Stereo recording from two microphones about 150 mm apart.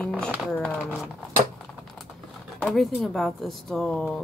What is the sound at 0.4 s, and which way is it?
Speech, 5° left (ahead or behind).